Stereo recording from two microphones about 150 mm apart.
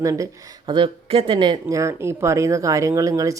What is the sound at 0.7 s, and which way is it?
Speech, 35° right (ahead or behind).